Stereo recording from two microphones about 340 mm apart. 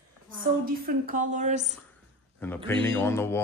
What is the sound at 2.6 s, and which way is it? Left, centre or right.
Speech, centre.